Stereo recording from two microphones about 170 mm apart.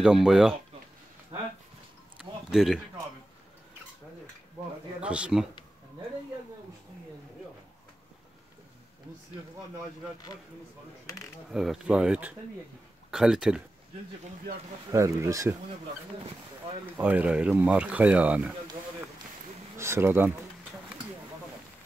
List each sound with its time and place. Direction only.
0.0 s speech: 5° right (ahead or behind)
2.1 s a sound: 5° right (ahead or behind)
5.0 s speech: 5° right (ahead or behind)
11.5 s speech: 5° right (ahead or behind)
14.9 s speech: 15° right (ahead or behind)
16.9 s speech: 10° right (ahead or behind)
19.8 s speech: 15° right (ahead or behind)